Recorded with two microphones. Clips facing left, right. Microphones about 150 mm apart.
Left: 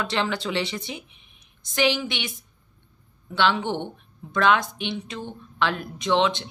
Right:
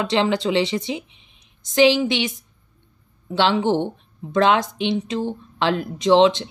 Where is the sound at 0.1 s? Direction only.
25° right (ahead or behind).